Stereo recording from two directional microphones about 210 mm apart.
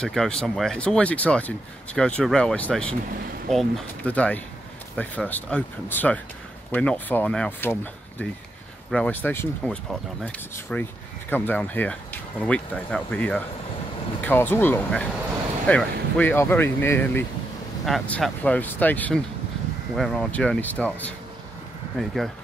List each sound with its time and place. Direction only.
0.0 s speech: 5° left (ahead or behind)